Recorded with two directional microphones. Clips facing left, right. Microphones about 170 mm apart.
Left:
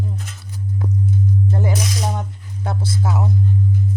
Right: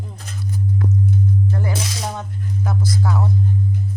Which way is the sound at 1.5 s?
20° left (ahead or behind).